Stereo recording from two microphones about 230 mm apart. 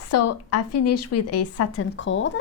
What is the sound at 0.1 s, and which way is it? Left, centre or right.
A woman's voice, left.